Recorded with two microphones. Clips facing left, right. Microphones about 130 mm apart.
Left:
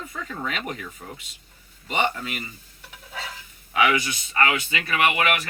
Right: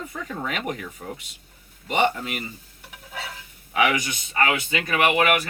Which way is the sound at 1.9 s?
15° right (ahead or behind).